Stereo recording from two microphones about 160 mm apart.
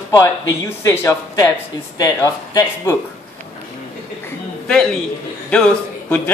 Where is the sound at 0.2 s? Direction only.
15° left (ahead or behind).